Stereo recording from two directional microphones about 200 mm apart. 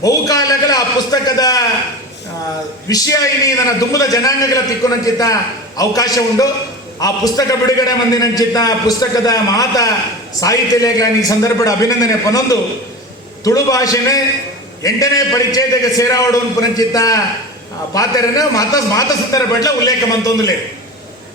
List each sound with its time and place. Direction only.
0.0 s a man's voice: 20° left (ahead or behind)
2.9 s a man's voice: 15° left (ahead or behind)